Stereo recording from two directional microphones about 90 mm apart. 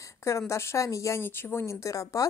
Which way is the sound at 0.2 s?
35° left (ahead or behind).